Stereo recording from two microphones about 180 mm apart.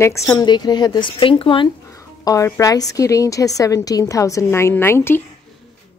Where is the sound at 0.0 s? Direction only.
15° left (ahead or behind).